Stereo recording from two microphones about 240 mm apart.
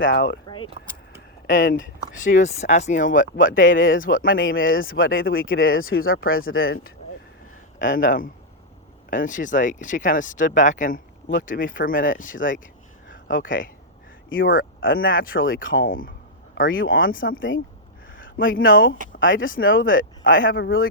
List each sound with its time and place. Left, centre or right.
0.0 s speech: left
1.5 s speech: left
4.4 s speech: left
6.1 s speech: left
16.8 s speech: left
18.2 s speech: left
18.7 s speech: left
19.8 s speech: left